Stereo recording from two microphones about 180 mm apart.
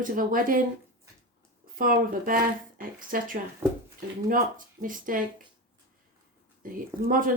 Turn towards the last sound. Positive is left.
turn(degrees=-50)  # may be behind; listen again after turning